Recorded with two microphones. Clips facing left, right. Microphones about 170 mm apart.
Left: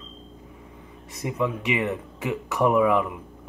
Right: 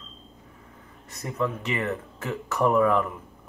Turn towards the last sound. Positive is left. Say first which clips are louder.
# left 1 dB
turn(degrees=5)  # may be behind; listen again after turning